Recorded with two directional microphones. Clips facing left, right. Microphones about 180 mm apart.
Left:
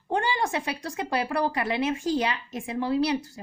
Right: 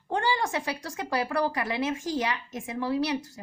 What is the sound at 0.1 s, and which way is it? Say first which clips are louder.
Speech: left 1 dB; 20° left (ahead or behind).